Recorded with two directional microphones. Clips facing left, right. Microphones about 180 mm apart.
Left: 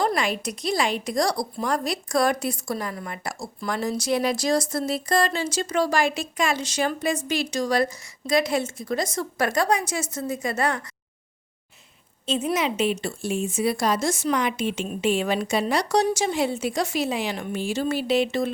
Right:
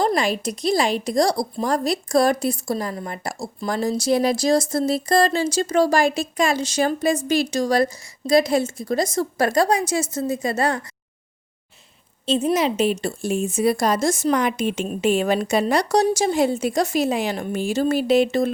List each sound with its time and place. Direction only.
0.0 s speech: 30° right (ahead or behind)
12.2 s speech: 35° right (ahead or behind)